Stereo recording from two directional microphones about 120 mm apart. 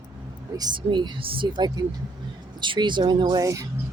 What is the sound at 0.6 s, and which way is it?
Speech, 35° right (ahead or behind).